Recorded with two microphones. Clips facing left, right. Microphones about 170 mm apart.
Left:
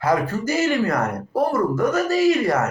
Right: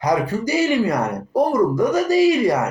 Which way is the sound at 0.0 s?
15° right (ahead or behind).